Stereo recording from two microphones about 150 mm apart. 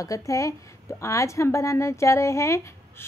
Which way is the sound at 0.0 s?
20° left (ahead or behind).